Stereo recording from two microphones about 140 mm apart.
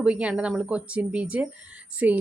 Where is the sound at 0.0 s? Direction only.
10° right (ahead or behind).